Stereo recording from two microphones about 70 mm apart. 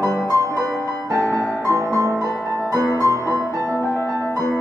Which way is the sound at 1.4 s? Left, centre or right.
Centre.